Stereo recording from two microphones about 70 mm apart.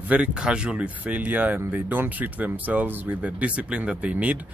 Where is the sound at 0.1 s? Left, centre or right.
Centre.